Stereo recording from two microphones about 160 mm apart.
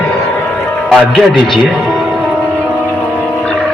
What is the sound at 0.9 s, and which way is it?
Speech, centre (ahead or behind).